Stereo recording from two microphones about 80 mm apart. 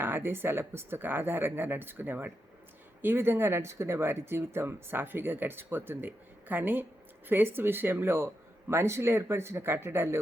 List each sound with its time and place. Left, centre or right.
0.0 s speech: right